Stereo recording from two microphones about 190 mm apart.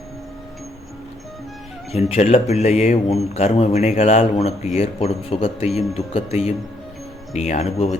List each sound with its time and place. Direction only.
1.9 s speech: 35° left (ahead or behind)